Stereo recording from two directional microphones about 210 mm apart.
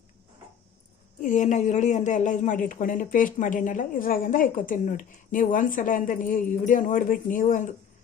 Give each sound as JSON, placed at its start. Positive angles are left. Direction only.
{"t": 1.2, "sound": "speech", "side_deg": 35}